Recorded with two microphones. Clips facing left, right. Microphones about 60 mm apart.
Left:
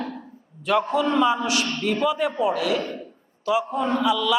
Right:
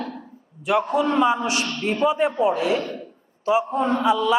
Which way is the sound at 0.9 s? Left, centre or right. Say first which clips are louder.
Right 2 dB; right.